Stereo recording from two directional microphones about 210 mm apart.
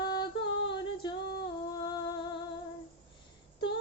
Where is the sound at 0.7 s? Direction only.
20° left (ahead or behind).